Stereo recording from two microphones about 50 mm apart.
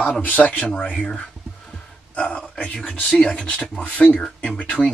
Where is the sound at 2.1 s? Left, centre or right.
Left.